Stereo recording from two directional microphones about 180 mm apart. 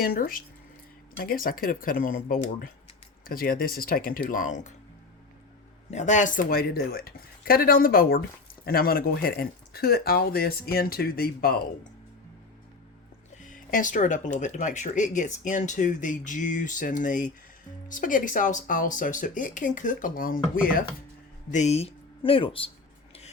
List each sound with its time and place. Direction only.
0.0 s speech: 50° left (ahead or behind)
5.9 s speech: 40° left (ahead or behind)
13.4 s speech: 45° left (ahead or behind)
21.5 s speech: 40° left (ahead or behind)